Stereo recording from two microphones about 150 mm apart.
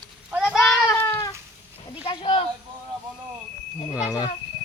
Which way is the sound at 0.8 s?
20° left (ahead or behind).